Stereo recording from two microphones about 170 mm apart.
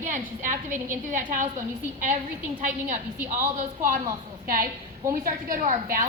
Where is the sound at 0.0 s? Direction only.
50° right (ahead or behind).